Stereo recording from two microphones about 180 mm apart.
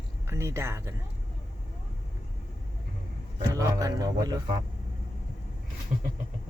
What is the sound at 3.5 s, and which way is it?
Speech, 20° right (ahead or behind).